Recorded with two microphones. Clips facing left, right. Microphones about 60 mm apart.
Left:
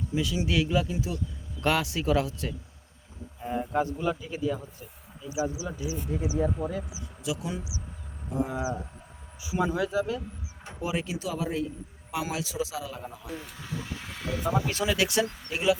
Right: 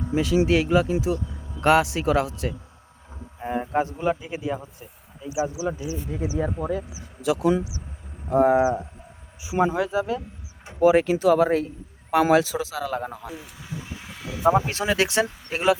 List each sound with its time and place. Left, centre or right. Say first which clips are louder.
0.1 s speech: right 8 dB; right
3.4 s a sound: right 4 dB; right
4.3 s speech: right 1 dB; right
5.6 s a man's voice: right 5 dB; right
8.3 s speech: right 13 dB; right
9.6 s a man's voice: right 5 dB; right
13.3 s vehicle: even; centre
14.1 s a sound: left 3 dB; centre
14.5 s speech: right 5 dB; right
15.5 s a man's voice: right 4 dB; right